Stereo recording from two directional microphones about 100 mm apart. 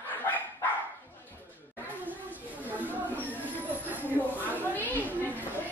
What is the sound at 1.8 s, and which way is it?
Chatter, 20° right (ahead or behind).